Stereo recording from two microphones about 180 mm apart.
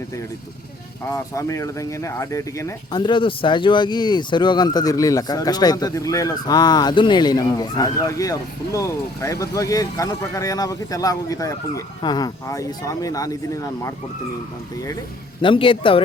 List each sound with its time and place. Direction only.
1.1 s speech: 15° left (ahead or behind)
15.4 s speech: 30° left (ahead or behind)